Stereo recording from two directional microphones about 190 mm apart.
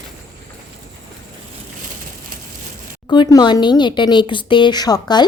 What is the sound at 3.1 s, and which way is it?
Speech, 20° left (ahead or behind).